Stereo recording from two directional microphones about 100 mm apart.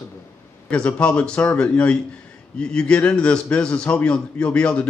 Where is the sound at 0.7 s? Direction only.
10° left (ahead or behind).